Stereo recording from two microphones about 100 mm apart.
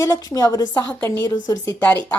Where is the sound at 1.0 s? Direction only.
20° left (ahead or behind).